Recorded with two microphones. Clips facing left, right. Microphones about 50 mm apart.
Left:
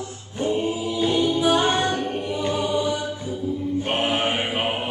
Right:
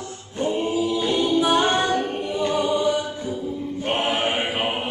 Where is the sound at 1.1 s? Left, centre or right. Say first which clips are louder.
Right 1 dB; centre.